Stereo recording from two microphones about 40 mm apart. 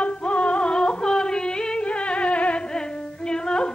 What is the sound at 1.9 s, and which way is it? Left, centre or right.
Music, left.